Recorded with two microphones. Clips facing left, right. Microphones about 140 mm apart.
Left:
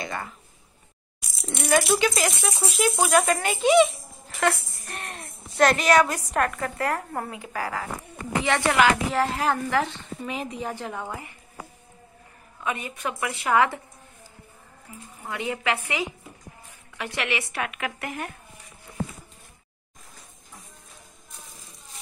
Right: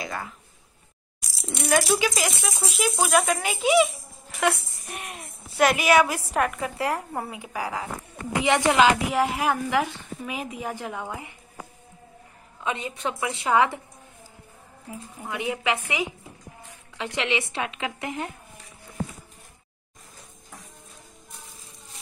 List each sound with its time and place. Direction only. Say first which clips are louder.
0.0 s speech: even; centre (ahead or behind)
1.4 s a woman's voice: left 1 dB; centre (ahead or behind); by 11.3 s 15° right (ahead or behind)
12.6 s speech: right 1 dB; 20° right (ahead or behind)
15.2 s a woman's voice: right 1 dB; 15° right (ahead or behind)
16.9 s speech: right 2 dB; 20° right (ahead or behind)